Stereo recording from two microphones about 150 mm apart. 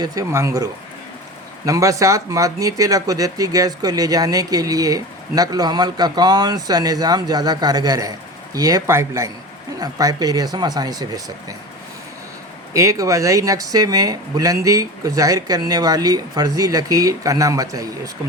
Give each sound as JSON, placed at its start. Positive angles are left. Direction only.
{"t": 0.0, "sound": "speech", "side_deg": -20}
{"t": 12.7, "sound": "speech", "side_deg": -20}